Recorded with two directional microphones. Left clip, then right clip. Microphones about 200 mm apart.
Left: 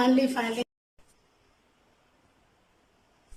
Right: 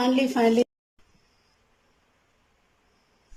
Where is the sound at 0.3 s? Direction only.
30° right (ahead or behind).